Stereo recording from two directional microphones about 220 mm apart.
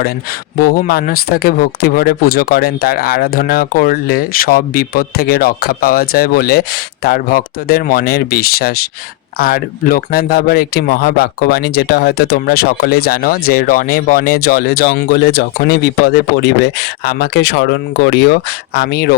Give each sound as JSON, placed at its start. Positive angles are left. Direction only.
{"t": 0.6, "sound": "speech", "side_deg": 40}